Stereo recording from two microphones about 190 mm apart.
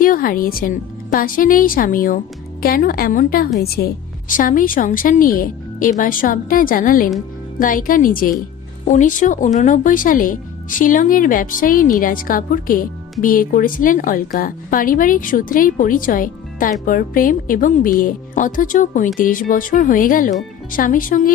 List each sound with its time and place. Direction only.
0.0 s a woman's voice: 45° left (ahead or behind)